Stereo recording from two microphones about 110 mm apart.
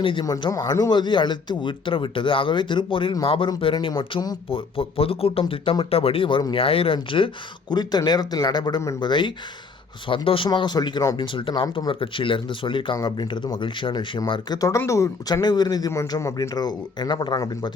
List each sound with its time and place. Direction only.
0.0 s speech: 50° left (ahead or behind)
0.5 s speech: 40° left (ahead or behind)
7.7 s speech: 40° left (ahead or behind)
11.0 s speech: 30° left (ahead or behind)
11.3 s speech: 50° left (ahead or behind)
14.8 s speech: 25° left (ahead or behind)